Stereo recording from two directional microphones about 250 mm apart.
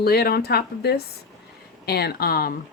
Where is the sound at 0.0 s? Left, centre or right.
Left.